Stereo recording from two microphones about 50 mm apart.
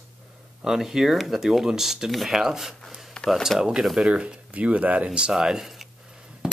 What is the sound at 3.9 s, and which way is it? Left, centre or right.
Speech, centre.